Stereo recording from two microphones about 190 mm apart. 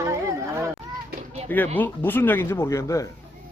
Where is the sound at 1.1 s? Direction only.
35° right (ahead or behind).